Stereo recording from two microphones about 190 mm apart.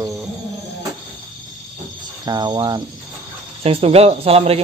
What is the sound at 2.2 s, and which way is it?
Cricket, 20° right (ahead or behind).